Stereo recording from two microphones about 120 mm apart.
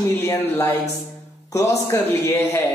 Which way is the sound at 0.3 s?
25° left (ahead or behind).